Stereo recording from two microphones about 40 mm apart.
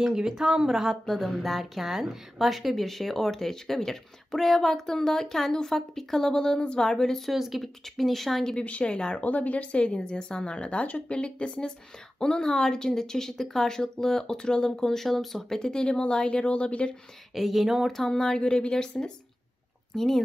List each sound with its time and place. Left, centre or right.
0.0 s speech: centre
1.0 s a woman's voice: centre
6.9 s speech: centre
7.3 s speech: centre
7.6 s a woman's voice: centre
8.5 s speech: left
9.2 s speech: left
12.2 s speech: centre
17.3 s a woman's voice: centre
18.1 s speech: centre